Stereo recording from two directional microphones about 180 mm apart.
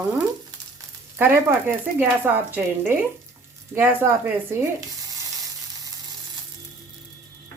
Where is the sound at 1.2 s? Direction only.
10° right (ahead or behind).